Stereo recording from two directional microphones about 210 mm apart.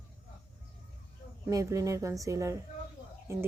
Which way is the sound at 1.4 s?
15° right (ahead or behind).